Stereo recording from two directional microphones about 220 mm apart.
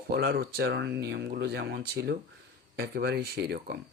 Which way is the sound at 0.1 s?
45° right (ahead or behind).